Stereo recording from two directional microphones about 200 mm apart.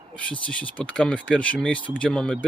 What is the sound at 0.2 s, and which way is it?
Speech, 5° left (ahead or behind).